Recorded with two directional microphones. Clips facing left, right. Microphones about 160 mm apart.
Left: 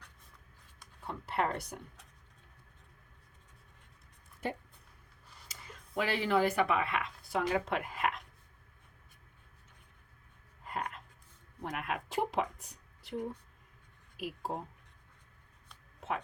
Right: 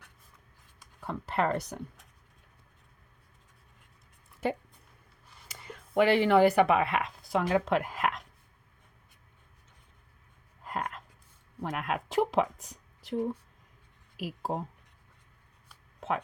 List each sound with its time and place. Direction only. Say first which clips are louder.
1.0 s speech: right 4 dB; 90° right
5.5 s speech: right 7 dB; 65° right (ahead or behind); by 8.2 s 90° right
10.6 s a sound: right 3 dB; 90° right
11.6 s speech: right 5 dB; 90° right
14.2 s speech: right 4 dB; 90° right